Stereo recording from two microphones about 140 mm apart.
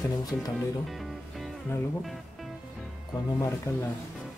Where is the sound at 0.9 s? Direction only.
Centre (ahead or behind).